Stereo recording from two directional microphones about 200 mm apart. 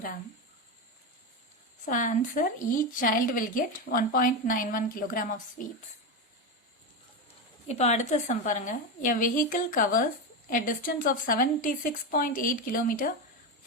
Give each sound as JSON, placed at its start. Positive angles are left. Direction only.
{"t": 1.8, "sound": "a woman's voice", "side_deg": 40}
{"t": 7.7, "sound": "a woman's voice", "side_deg": 35}